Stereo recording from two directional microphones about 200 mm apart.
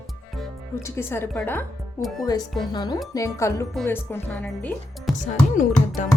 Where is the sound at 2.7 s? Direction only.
20° left (ahead or behind).